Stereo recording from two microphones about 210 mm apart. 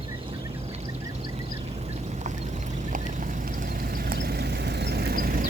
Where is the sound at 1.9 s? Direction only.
35° right (ahead or behind).